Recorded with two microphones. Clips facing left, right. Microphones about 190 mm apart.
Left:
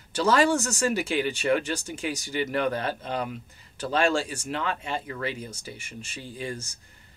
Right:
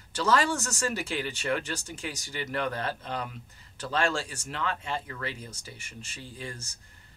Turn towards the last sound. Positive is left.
turn(degrees=15)  # may be behind; listen again after turning